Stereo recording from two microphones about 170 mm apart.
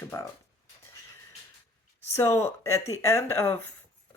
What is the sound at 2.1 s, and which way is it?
Speech, 15° left (ahead or behind).